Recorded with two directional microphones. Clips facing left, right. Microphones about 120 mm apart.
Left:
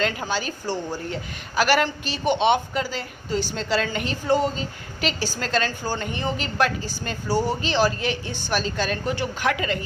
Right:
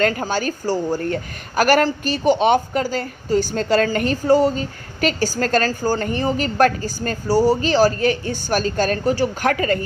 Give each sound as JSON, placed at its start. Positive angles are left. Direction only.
{"t": 0.0, "sound": "a woman's voice", "side_deg": -45}